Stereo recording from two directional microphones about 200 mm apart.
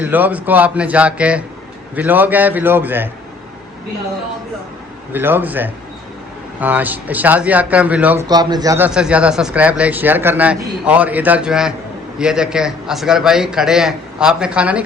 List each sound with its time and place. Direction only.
0.0 s a man's voice: 10° right (ahead or behind)
5.1 s a man's voice: 10° right (ahead or behind)
8.3 s speech: 20° right (ahead or behind)
8.9 s a man's voice: 5° right (ahead or behind)